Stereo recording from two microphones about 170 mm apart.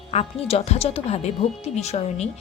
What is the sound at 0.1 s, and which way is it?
A woman's voice, 35° left (ahead or behind).